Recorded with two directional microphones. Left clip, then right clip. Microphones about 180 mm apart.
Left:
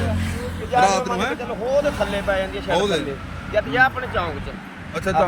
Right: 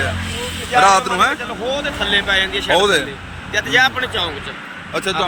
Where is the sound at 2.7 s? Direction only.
5° left (ahead or behind).